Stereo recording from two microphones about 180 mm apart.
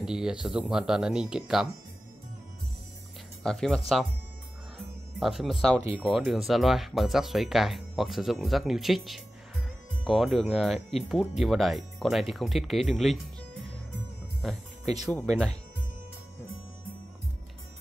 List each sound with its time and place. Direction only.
0.0 s speech: 5° right (ahead or behind)
3.4 s speech: 5° left (ahead or behind)